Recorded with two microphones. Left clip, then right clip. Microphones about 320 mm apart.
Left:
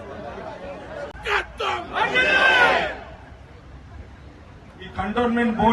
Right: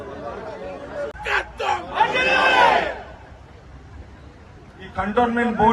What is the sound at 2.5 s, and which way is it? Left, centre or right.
Crowd, centre.